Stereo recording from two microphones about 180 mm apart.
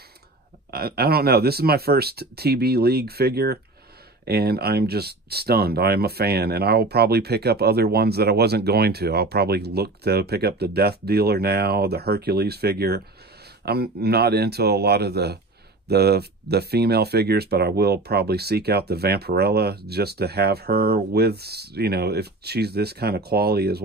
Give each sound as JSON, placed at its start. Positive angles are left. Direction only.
{"t": 0.7, "sound": "speech", "side_deg": -60}